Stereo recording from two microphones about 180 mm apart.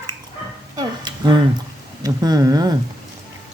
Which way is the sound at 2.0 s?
20° right (ahead or behind).